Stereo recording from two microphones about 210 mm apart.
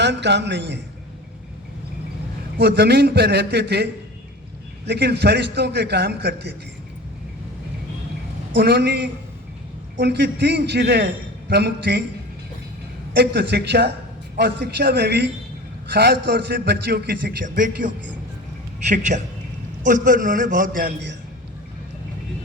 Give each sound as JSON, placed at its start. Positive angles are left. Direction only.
{"t": 0.0, "sound": "a man's voice", "side_deg": -55}
{"t": 2.6, "sound": "a man's voice", "side_deg": -50}
{"t": 4.9, "sound": "a man's voice", "side_deg": -50}
{"t": 8.5, "sound": "a man's voice", "side_deg": -50}
{"t": 13.1, "sound": "a man's voice", "side_deg": -50}